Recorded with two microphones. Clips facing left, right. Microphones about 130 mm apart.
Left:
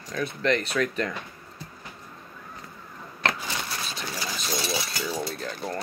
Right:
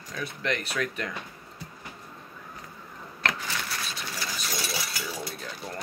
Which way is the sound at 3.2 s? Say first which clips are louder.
Left 2 dB; 20° left (ahead or behind).